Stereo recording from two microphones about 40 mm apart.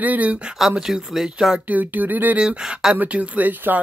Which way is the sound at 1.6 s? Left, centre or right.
Right.